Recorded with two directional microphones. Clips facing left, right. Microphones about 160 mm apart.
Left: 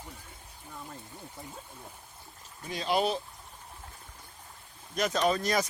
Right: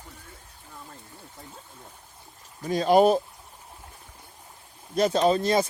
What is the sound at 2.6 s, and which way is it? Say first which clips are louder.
Speech: right 10 dB; 45° right (ahead or behind).